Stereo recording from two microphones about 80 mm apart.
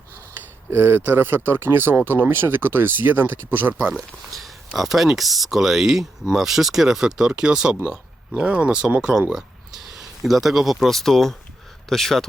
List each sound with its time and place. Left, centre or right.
0.7 s speech: right
3.9 s speech: centre